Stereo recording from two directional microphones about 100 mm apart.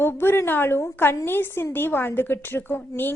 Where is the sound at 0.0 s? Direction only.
25° left (ahead or behind).